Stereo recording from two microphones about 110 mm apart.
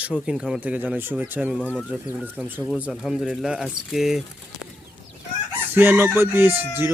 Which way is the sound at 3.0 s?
5° right (ahead or behind).